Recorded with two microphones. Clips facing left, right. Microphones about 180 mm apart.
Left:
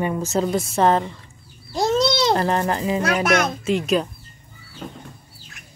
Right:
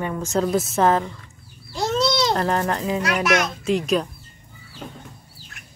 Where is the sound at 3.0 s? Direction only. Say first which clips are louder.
Left 2 dB; 50° left (ahead or behind).